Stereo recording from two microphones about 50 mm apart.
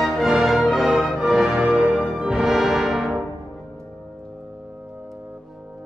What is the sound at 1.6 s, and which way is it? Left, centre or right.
Music, right.